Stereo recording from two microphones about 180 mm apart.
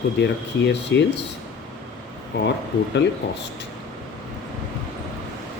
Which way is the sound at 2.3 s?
70° left (ahead or behind).